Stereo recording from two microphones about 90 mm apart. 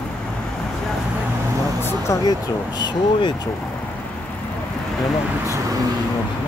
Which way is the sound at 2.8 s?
60° left (ahead or behind).